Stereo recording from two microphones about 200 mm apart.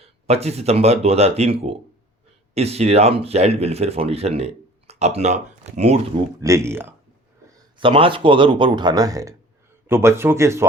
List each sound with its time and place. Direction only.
0.0 s speech: 30° right (ahead or behind)
6.4 s speech: 15° right (ahead or behind)